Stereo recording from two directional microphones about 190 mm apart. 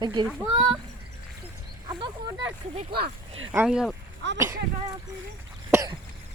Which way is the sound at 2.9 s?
55° right (ahead or behind).